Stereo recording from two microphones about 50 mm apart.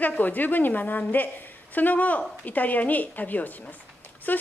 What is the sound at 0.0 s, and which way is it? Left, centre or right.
A woman's voice, left.